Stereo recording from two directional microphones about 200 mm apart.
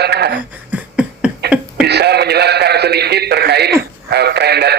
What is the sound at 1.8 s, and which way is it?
Speech, 55° right (ahead or behind).